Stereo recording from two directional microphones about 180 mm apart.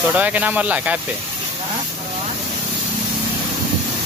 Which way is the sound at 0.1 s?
10° right (ahead or behind).